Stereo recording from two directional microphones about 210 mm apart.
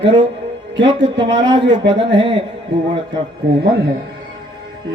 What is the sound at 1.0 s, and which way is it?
Speech, 60° right (ahead or behind).